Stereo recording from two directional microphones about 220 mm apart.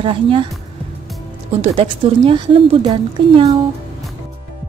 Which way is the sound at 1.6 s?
25° right (ahead or behind).